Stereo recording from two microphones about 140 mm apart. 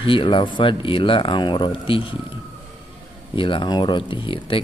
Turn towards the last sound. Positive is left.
turn(degrees=40)  # may be behind; listen again after turning